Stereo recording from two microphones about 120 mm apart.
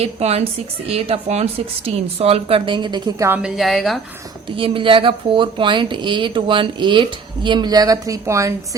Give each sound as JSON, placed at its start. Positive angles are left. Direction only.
{"t": 0.0, "sound": "speech", "side_deg": -60}
{"t": 3.2, "sound": "a woman's voice", "side_deg": -20}
{"t": 3.4, "sound": "speech", "side_deg": 0}
{"t": 4.5, "sound": "speech", "side_deg": -45}